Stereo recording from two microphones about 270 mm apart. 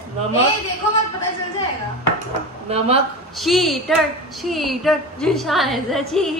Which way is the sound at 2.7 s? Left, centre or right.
Right.